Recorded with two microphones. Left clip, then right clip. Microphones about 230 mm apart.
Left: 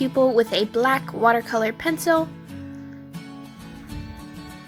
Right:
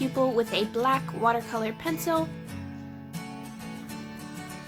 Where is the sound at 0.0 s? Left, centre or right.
Left.